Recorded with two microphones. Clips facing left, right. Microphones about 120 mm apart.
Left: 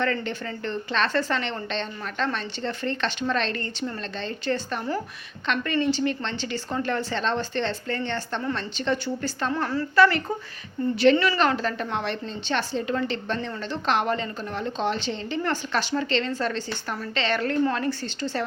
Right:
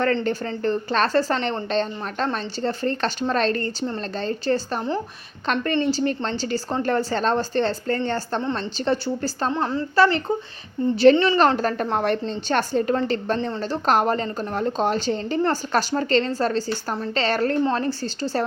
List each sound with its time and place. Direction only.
0.0 s a woman's voice: 40° right (ahead or behind)
9.5 s a woman's voice: 20° right (ahead or behind)
11.3 s a woman's voice: 40° right (ahead or behind)